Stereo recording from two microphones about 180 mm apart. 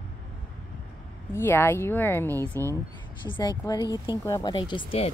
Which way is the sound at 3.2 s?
25° left (ahead or behind).